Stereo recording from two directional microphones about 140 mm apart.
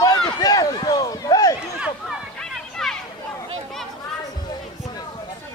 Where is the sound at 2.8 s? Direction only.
5° left (ahead or behind).